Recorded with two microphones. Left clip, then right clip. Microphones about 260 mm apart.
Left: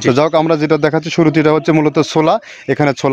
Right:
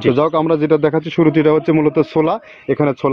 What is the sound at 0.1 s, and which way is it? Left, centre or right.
Speech, left.